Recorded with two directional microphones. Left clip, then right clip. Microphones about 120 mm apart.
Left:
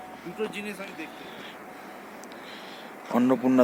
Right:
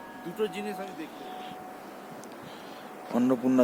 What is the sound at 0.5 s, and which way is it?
Speech, 60° right (ahead or behind).